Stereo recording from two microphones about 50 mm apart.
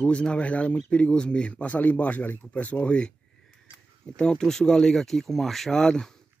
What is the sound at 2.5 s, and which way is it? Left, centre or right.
Speech, left.